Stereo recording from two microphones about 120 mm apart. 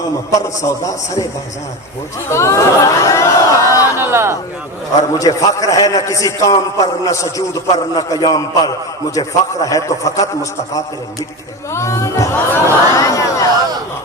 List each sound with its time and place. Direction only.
0.3 s a man's voice: 30° left (ahead or behind)
2.3 s crowd: 25° left (ahead or behind)
3.9 s speech: 20° right (ahead or behind)
5.1 s a man's voice: 30° left (ahead or behind)
11.7 s a sound: 25° left (ahead or behind)